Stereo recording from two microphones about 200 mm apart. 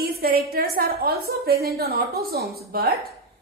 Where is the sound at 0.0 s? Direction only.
50° right (ahead or behind).